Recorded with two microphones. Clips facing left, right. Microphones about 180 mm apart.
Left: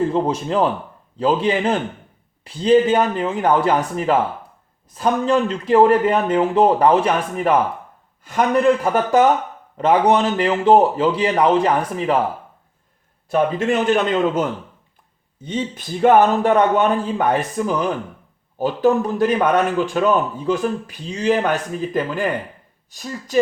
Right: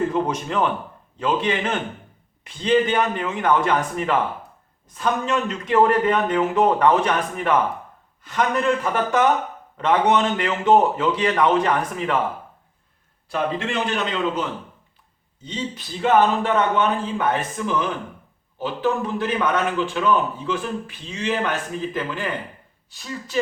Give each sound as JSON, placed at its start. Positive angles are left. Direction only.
{"t": 0.1, "sound": "a man's voice", "side_deg": 30}
{"t": 8.5, "sound": "a man's voice", "side_deg": 35}
{"t": 13.3, "sound": "a man's voice", "side_deg": 45}